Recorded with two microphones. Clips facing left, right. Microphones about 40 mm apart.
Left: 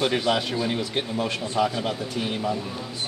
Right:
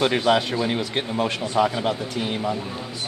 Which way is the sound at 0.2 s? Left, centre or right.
Right.